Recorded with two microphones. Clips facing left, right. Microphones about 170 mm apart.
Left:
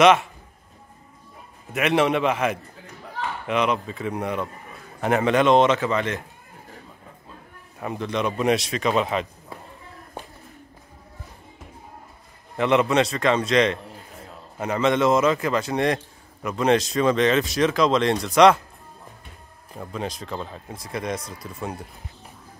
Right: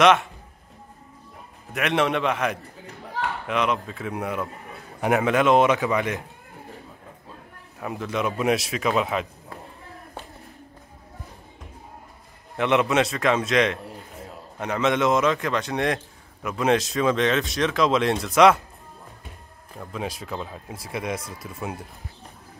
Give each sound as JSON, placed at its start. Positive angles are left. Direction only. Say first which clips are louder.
{"t": 0.0, "sound": "speech", "louder": "left 2 dB", "side_deg": 0}
{"t": 1.7, "sound": "a man's voice", "louder": "left 3 dB", "side_deg": 0}
{"t": 7.8, "sound": "speech", "louder": "left 1 dB", "side_deg": 0}
{"t": 12.5, "sound": "speech", "louder": "left 1 dB", "side_deg": 0}
{"t": 19.8, "sound": "speech", "louder": "left 1 dB", "side_deg": 0}